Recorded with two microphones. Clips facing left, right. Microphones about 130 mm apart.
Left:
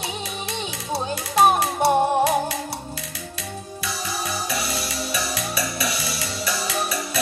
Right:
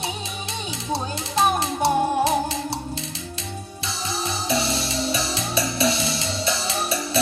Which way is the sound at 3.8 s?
25° right (ahead or behind).